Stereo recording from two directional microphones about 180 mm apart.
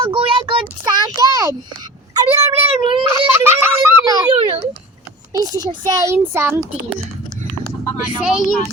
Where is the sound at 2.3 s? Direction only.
35° right (ahead or behind).